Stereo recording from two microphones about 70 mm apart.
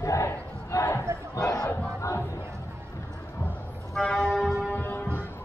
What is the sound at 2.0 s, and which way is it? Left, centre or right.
Crowd, left.